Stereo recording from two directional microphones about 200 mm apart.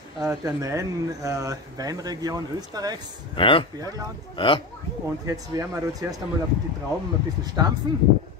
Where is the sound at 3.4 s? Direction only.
25° left (ahead or behind).